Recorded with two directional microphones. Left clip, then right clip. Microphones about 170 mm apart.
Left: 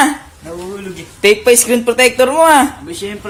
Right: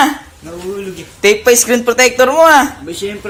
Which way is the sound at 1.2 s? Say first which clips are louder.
Even; 10° left (ahead or behind).